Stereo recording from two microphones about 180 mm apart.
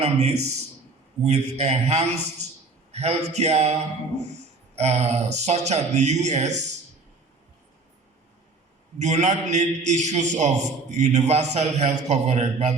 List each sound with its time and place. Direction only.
0.0 s a man's voice: 35° right (ahead or behind)
9.0 s a man's voice: 40° right (ahead or behind)